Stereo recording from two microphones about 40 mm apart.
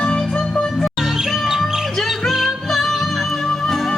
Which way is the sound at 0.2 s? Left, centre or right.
Centre.